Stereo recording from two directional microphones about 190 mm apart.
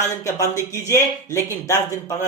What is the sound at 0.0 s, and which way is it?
Speech, 15° left (ahead or behind).